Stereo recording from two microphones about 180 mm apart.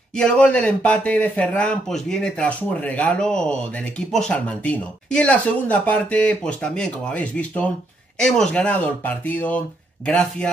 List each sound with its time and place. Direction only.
0.1 s speech: 5° left (ahead or behind)